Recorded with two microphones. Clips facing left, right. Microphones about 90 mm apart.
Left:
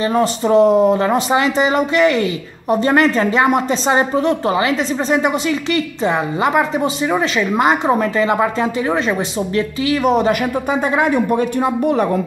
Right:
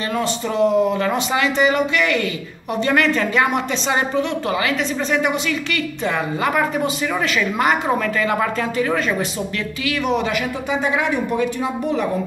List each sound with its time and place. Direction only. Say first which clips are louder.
0.1 s a woman's voice: left 8 dB; 35° left (ahead or behind)
1.0 s a woman's voice: left 4 dB; 30° left (ahead or behind)
9.8 s speech: left 5 dB; 40° left (ahead or behind)